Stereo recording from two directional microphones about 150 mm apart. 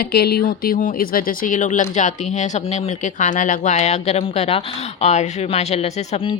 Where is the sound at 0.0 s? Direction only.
90° left.